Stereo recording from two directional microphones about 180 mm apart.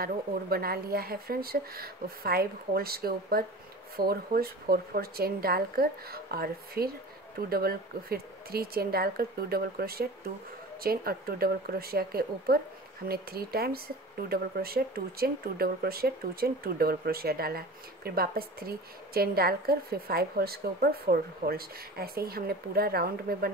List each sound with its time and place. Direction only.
0.0 s speech: 55° right (ahead or behind)